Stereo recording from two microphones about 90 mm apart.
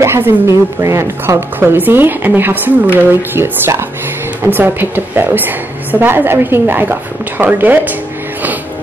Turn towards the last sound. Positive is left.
turn(degrees=-20)  # may be behind; listen again after turning